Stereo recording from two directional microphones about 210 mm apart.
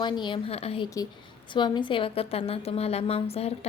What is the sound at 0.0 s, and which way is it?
A woman's voice, 20° left (ahead or behind).